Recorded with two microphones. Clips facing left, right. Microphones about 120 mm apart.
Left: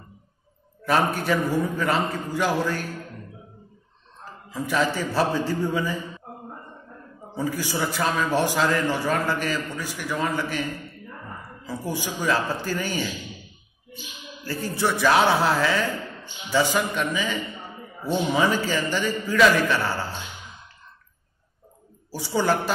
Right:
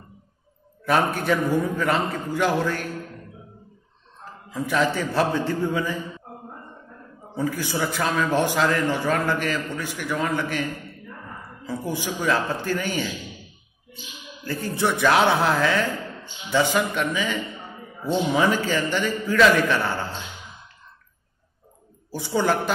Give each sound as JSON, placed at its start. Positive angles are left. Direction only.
{"t": 0.8, "sound": "a man's voice", "side_deg": 5}
{"t": 4.2, "sound": "a man's voice", "side_deg": 10}
{"t": 7.3, "sound": "a man's voice", "side_deg": 10}
{"t": 12.2, "sound": "a man's voice", "side_deg": 10}
{"t": 14.4, "sound": "a man's voice", "side_deg": 10}
{"t": 18.4, "sound": "a man's voice", "side_deg": 10}
{"t": 19.7, "sound": "a sound", "side_deg": 10}
{"t": 22.1, "sound": "a man's voice", "side_deg": 10}